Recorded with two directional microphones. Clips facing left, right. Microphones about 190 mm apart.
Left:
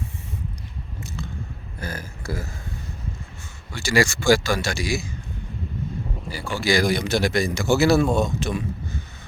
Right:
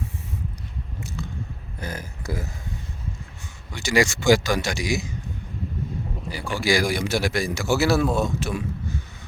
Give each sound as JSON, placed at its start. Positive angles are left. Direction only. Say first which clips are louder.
{"t": 1.8, "sound": "speech", "louder": "even", "side_deg": -20}
{"t": 3.7, "sound": "a man's voice", "louder": "even", "side_deg": -20}
{"t": 6.4, "sound": "a man's voice", "louder": "left 1 dB", "side_deg": -15}